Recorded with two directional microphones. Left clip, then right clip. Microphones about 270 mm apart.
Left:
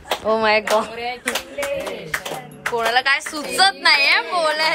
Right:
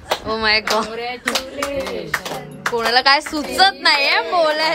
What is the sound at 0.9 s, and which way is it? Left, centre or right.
Speech, right.